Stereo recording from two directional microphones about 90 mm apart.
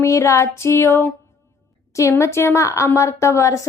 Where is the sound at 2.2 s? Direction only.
30° left (ahead or behind).